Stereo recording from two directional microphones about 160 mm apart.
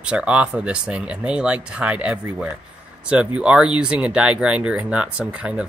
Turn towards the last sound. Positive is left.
turn(degrees=-5)  # may be behind; listen again after turning